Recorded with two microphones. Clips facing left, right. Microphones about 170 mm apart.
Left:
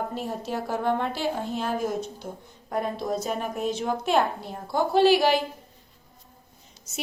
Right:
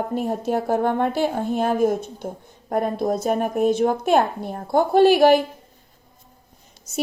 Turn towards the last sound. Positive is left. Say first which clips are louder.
# right 6 dB
turn(degrees=-50)  # may be behind; listen again after turning